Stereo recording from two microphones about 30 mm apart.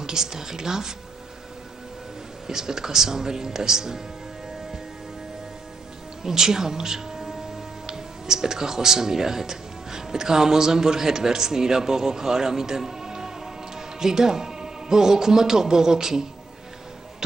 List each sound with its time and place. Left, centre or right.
0.0 s speech: centre
2.4 s speech: centre
6.2 s speech: centre